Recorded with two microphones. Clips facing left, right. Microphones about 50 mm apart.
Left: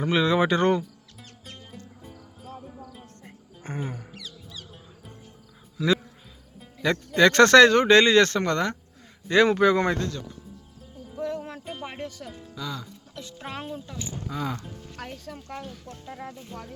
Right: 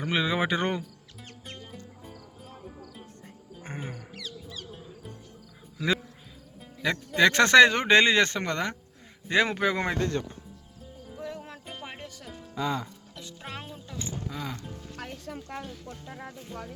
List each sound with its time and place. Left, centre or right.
0.0 s speech: centre
1.5 s music: centre
3.6 s music: right
6.6 s speech: centre
10.1 s speech: right
11.2 s music: centre
11.5 s music: centre
12.5 s speech: right
13.4 s music: centre
15.1 s speech: centre